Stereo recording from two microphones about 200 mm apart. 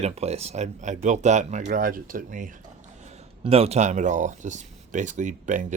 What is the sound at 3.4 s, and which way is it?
Speech, 30° right (ahead or behind).